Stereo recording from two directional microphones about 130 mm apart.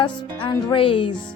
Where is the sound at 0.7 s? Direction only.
45° left (ahead or behind).